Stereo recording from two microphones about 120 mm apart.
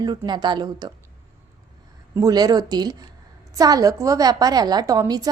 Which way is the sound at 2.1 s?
30° right (ahead or behind).